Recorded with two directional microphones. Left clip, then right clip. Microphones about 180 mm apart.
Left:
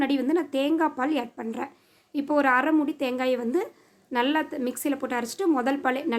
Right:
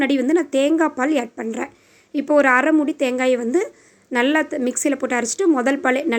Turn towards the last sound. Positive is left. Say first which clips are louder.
# right 7 dB
turn(degrees=-20)  # may be behind; listen again after turning